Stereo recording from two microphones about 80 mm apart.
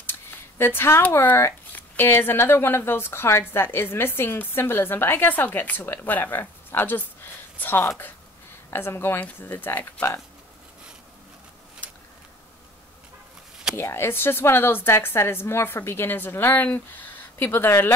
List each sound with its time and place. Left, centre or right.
0.0 s a sound: left
1.1 s speech: left
13.7 s speech: left